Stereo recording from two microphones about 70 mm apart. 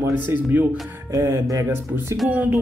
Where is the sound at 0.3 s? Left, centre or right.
Right.